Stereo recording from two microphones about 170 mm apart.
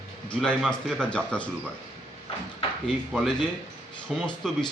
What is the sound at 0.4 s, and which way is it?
Speech, centre (ahead or behind).